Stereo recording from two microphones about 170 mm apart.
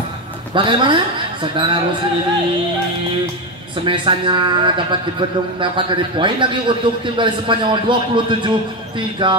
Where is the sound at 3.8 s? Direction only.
30° right (ahead or behind).